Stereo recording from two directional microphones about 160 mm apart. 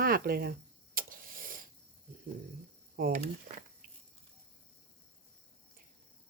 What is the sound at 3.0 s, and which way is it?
Speech, 60° right (ahead or behind).